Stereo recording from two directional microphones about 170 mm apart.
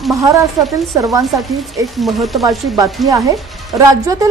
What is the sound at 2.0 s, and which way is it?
Speech, centre (ahead or behind).